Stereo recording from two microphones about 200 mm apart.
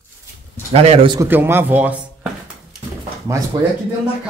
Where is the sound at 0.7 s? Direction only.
30° right (ahead or behind).